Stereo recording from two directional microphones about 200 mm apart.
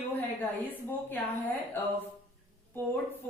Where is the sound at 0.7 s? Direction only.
10° left (ahead or behind).